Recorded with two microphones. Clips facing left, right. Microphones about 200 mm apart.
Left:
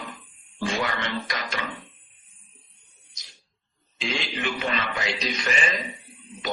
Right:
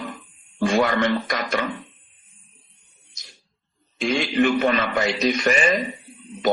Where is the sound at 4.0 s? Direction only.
50° right (ahead or behind).